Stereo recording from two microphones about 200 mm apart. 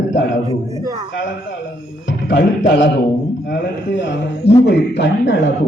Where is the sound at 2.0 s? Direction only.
60° left (ahead or behind).